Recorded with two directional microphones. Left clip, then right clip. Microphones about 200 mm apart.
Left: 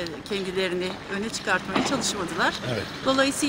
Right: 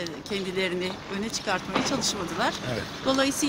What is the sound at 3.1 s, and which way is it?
Speech, 5° right (ahead or behind).